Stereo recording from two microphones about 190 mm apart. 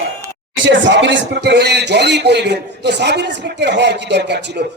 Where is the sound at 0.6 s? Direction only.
75° right (ahead or behind).